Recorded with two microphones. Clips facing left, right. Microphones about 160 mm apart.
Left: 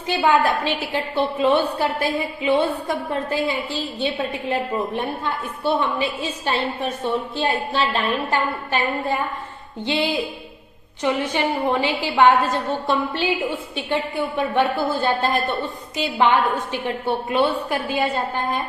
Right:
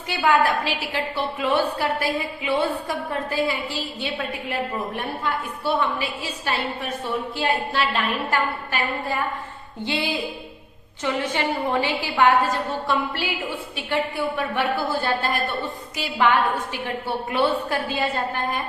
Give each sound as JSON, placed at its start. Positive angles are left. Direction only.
{"t": 0.1, "sound": "a woman's voice", "side_deg": 25}